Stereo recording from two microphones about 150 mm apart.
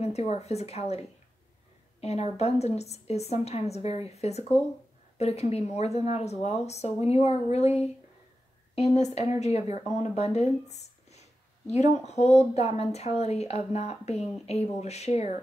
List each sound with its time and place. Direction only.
0.0 s speech: 45° left (ahead or behind)
2.0 s a sound: 45° left (ahead or behind)
2.3 s speech: 45° left (ahead or behind)